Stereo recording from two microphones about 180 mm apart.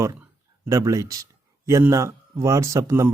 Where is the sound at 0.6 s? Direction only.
15° right (ahead or behind).